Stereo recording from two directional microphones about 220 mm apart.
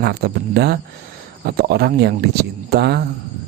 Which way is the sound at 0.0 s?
45° right (ahead or behind).